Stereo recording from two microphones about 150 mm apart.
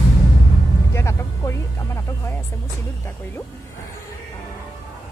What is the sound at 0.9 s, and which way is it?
Music, 20° left (ahead or behind).